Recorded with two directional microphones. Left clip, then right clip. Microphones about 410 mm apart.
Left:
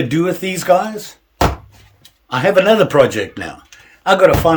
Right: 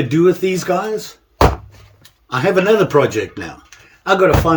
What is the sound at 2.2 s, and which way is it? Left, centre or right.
Speech, centre.